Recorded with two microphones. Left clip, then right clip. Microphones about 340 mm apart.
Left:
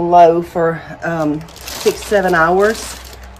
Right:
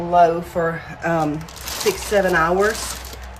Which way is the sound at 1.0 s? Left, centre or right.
Centre.